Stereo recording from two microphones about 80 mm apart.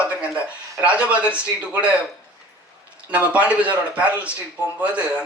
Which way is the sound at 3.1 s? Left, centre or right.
Centre.